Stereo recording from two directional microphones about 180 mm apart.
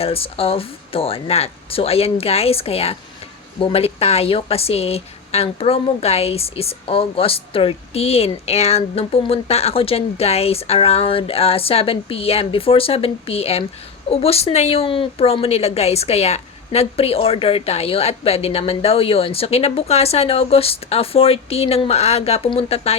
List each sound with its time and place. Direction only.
0.0 s a woman's voice: 30° left (ahead or behind)